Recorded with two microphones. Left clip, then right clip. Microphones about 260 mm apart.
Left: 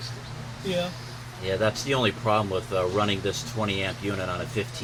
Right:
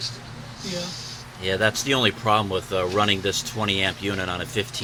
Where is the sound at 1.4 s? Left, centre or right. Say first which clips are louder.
Right 3 dB; right.